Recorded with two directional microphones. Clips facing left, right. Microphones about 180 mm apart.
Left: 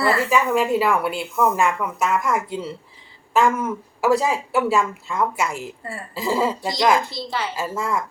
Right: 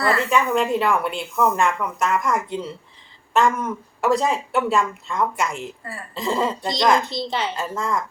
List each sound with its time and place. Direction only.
0.0 s speech: 5° left (ahead or behind)
7.1 s a woman's voice: 20° right (ahead or behind)
7.5 s speech: 5° left (ahead or behind)